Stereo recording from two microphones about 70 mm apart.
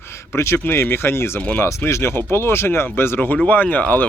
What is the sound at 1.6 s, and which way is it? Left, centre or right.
Speech, left.